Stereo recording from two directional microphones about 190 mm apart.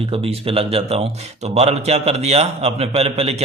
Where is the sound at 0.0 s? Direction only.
30° right (ahead or behind).